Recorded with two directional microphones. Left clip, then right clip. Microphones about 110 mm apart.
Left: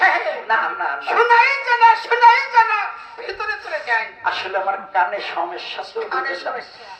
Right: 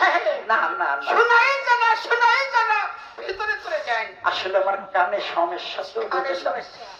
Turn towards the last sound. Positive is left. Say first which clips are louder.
# left 1 dB
turn(degrees=-50)  # may be behind; listen again after turning